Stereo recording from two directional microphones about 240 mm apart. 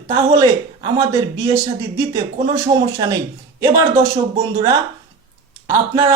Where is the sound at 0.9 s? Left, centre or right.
Centre.